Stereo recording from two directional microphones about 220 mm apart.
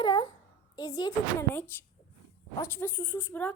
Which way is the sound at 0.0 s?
20° left (ahead or behind).